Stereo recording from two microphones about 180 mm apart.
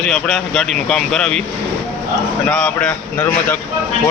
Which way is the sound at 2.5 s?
5° left (ahead or behind).